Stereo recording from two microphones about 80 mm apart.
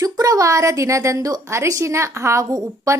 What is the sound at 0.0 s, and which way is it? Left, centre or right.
A woman's voice, right.